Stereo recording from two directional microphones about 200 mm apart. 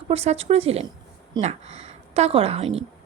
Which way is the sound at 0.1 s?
30° right (ahead or behind).